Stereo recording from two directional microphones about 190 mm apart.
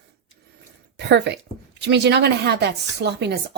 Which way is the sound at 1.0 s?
65° right (ahead or behind).